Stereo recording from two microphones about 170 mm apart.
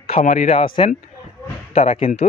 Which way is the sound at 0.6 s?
30° left (ahead or behind).